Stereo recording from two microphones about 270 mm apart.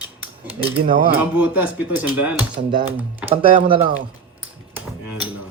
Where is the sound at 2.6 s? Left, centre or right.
Right.